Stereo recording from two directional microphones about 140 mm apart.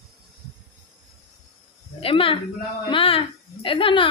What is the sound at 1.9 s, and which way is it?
A woman's voice, 40° left (ahead or behind).